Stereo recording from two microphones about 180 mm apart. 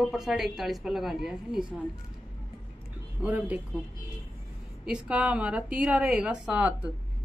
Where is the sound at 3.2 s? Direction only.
10° right (ahead or behind).